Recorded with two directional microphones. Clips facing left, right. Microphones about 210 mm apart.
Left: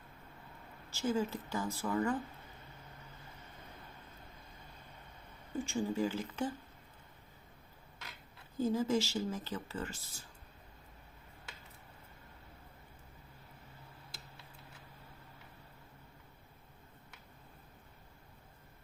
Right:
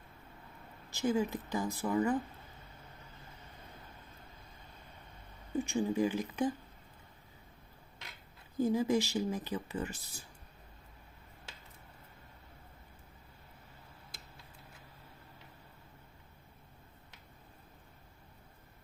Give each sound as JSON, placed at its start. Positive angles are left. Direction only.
{"t": 0.9, "sound": "speech", "side_deg": -15}
{"t": 5.5, "sound": "speech", "side_deg": -15}
{"t": 8.5, "sound": "speech", "side_deg": -15}